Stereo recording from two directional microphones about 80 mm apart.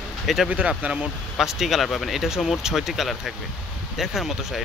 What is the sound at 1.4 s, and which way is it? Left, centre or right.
Speech, centre.